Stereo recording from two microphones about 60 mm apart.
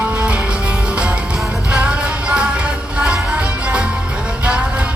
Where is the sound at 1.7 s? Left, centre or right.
Right.